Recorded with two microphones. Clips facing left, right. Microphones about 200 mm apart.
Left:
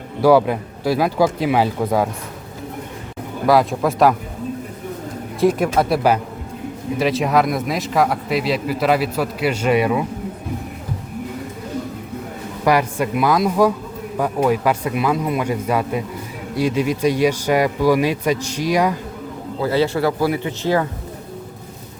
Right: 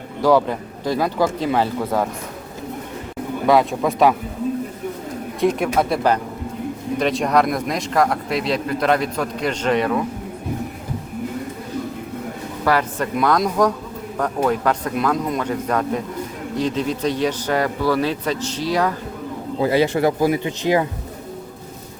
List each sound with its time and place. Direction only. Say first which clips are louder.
0.2 s speech: left 3 dB; 10° left (ahead or behind)
3.4 s a man's voice: left 1 dB; centre (ahead or behind)
5.4 s a man's voice: left 2 dB; 5° left (ahead or behind)
12.6 s speech: left 3 dB; 10° left (ahead or behind)
19.6 s speech: right 1 dB; 15° right (ahead or behind)